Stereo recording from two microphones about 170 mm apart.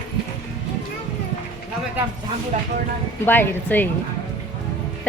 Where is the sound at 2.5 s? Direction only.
45° right (ahead or behind).